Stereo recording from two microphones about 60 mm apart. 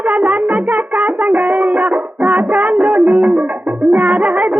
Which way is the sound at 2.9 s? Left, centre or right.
Centre.